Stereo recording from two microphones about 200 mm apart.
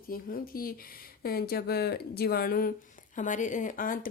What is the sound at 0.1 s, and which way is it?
Speech, 45° left (ahead or behind).